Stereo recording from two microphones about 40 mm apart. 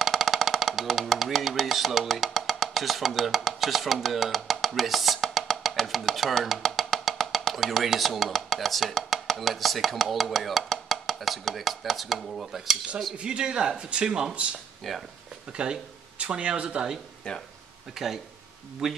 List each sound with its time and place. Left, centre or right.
0.0 s music: centre
1.0 s speech: centre
4.6 s music: centre
5.9 s chopping: centre
13.2 s speech: right
14.8 s speech: centre
15.5 s speech: right
17.3 s speech: left
17.9 s speech: centre